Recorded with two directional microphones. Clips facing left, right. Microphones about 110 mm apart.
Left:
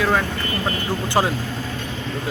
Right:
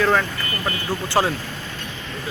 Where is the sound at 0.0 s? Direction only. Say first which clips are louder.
Right 1 dB; 10° left (ahead or behind).